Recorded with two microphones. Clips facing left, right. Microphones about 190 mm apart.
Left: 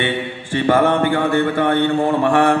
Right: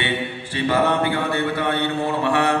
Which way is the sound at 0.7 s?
50° left (ahead or behind).